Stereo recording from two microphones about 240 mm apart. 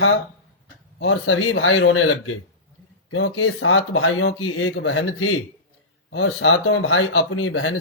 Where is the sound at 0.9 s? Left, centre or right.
Left.